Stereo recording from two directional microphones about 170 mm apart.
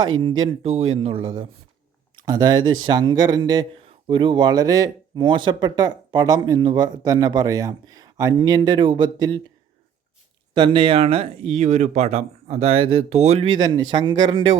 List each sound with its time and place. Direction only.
0.2 s speech: 25° right (ahead or behind)
10.5 s speech: 30° right (ahead or behind)